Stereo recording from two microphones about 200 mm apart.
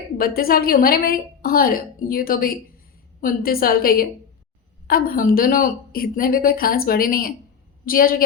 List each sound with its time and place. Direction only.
0.2 s a woman's voice: 50° left (ahead or behind)